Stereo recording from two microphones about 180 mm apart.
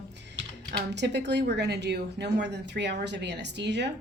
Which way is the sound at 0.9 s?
70° right (ahead or behind).